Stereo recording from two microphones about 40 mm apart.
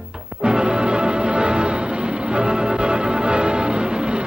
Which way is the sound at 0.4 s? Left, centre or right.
Right.